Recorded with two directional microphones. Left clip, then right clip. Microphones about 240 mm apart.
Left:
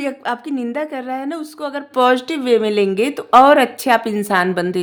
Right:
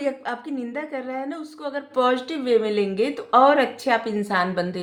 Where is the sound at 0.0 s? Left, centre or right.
Left.